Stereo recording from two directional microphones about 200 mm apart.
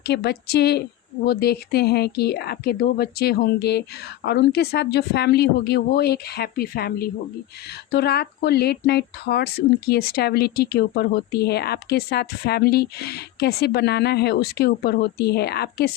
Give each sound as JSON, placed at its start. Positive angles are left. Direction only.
{"t": 0.0, "sound": "speech", "side_deg": 55}